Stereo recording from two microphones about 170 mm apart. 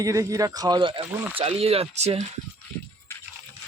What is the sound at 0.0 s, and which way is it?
Speech, 20° right (ahead or behind).